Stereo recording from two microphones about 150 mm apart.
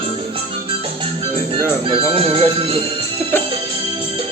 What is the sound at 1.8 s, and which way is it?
Music, 35° right (ahead or behind).